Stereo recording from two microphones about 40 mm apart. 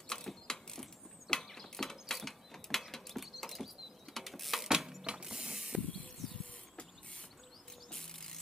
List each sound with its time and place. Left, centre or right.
0.1 s mechanisms: centre
1.3 s a sound: centre
4.6 s a sound: centre
5.0 s mechanisms: right
5.3 s mechanisms: centre
7.9 s music: centre